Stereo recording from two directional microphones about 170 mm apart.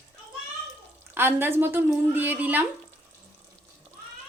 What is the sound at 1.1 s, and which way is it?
A woman's voice, 15° right (ahead or behind).